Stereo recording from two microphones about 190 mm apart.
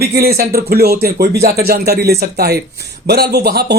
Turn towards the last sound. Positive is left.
turn(degrees=-55)  # may be behind; listen again after turning